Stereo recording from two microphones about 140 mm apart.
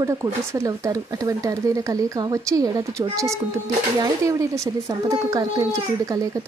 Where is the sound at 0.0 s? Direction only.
20° right (ahead or behind).